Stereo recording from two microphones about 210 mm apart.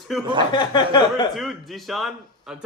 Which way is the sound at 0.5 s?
20° left (ahead or behind).